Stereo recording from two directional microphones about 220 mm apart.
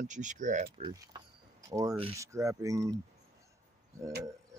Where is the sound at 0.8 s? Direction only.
15° right (ahead or behind).